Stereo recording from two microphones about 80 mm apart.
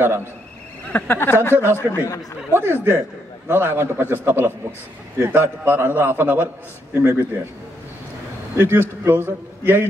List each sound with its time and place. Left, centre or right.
0.9 s speech: left
1.5 s a man's voice: right
1.8 s speech: left
2.5 s a man's voice: right
8.5 s a man's voice: right